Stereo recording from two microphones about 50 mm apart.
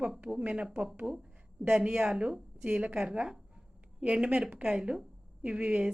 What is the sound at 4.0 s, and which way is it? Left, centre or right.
A woman's voice, right.